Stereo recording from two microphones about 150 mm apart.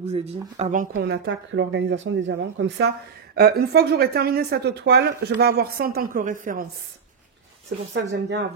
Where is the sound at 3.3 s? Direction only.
90° right; by 6.7 s 65° right (ahead or behind).